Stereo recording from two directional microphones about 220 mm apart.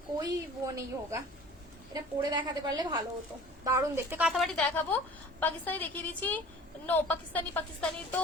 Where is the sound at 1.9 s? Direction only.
20° right (ahead or behind).